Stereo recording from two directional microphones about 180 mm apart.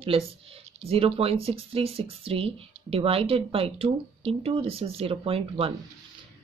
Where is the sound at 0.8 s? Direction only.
30° right (ahead or behind).